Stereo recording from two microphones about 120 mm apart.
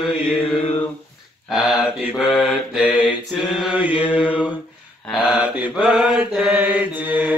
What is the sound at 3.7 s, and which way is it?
Speech, 10° right (ahead or behind).